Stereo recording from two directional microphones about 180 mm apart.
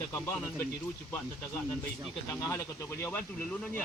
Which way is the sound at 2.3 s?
15° left (ahead or behind).